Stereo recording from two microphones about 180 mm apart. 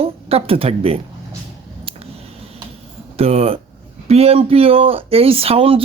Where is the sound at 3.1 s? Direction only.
35° right (ahead or behind).